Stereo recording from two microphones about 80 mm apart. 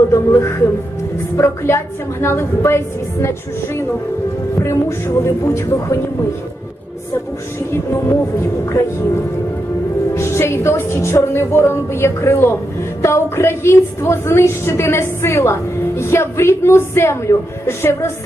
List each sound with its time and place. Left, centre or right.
0.1 s a woman's voice: left
4.6 s a woman's voice: left
7.7 s a woman's voice: left
10.2 s a woman's voice: left